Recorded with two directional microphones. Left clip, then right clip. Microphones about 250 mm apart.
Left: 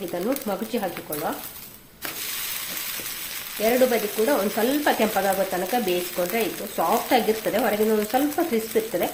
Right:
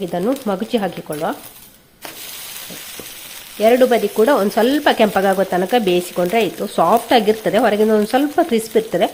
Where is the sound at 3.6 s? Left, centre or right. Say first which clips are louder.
Right 8 dB; right.